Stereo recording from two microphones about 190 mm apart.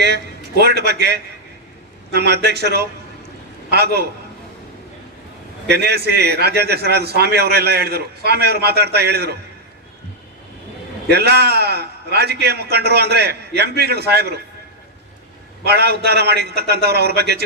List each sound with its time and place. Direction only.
0.0 s a man's voice: 60° right (ahead or behind)
5.6 s a man's voice: 60° right (ahead or behind)
11.1 s a man's voice: 60° right (ahead or behind)
15.6 s a man's voice: 60° right (ahead or behind)